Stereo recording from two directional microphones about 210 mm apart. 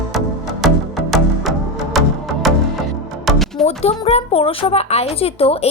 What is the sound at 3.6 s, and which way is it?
A woman's voice, 30° left (ahead or behind).